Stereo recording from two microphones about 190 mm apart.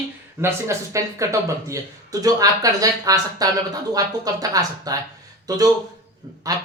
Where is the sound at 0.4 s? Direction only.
15° right (ahead or behind).